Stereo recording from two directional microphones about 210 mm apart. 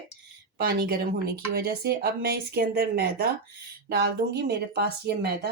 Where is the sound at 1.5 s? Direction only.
50° right (ahead or behind).